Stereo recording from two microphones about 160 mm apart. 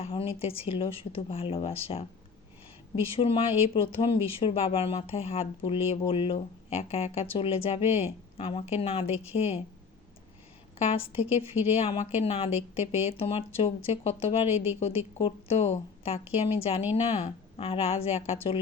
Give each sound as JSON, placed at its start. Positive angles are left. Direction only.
{"t": 0.0, "sound": "speech", "side_deg": 35}
{"t": 10.8, "sound": "speech", "side_deg": 35}